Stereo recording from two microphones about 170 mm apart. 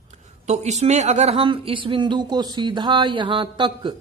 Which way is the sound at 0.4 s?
40° right (ahead or behind).